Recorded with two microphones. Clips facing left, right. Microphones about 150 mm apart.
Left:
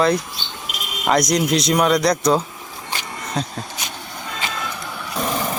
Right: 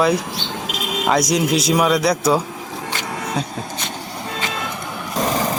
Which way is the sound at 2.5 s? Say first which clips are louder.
Right 5 dB; 90° right.